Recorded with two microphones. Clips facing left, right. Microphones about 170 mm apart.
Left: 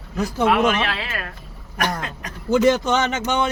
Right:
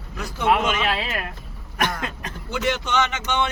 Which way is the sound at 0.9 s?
15° right (ahead or behind).